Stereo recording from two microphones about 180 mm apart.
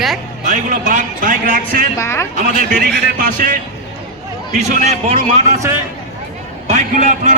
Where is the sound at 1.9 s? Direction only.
15° left (ahead or behind).